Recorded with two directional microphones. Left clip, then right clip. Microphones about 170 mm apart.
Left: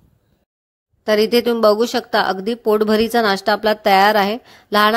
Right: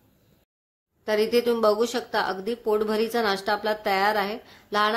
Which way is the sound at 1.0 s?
45° left (ahead or behind).